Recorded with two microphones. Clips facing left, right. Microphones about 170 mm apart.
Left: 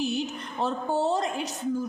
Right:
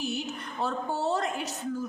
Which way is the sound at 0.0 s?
15° left (ahead or behind).